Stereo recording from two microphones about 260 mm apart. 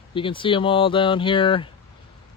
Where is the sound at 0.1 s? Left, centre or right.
Centre.